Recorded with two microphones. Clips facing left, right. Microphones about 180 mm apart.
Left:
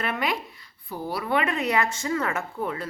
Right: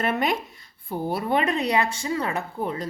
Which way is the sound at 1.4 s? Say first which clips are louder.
Right 1 dB; 20° right (ahead or behind).